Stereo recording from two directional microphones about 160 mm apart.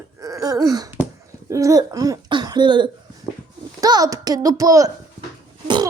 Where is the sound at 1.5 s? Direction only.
20° right (ahead or behind).